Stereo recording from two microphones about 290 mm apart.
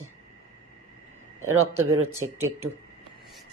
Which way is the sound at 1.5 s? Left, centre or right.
Right.